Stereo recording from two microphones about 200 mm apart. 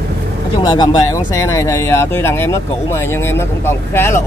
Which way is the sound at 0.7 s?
20° left (ahead or behind).